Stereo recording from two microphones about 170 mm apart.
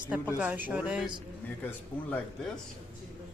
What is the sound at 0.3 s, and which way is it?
Speech, 10° right (ahead or behind).